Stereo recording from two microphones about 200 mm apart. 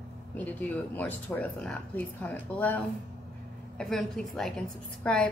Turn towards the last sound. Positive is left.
turn(degrees=5)  # may be behind; listen again after turning